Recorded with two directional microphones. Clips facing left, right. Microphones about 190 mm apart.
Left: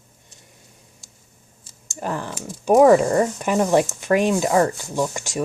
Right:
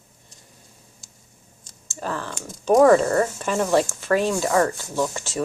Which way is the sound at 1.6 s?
15° left (ahead or behind).